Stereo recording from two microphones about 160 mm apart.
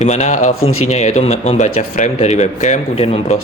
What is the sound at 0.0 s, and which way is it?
Speech, 45° left (ahead or behind).